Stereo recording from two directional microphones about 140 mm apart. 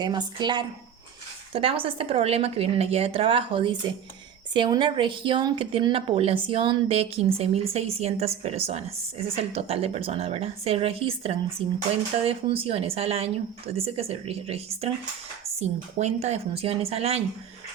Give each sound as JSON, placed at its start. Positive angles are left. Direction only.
{"t": 0.0, "sound": "speech", "side_deg": -30}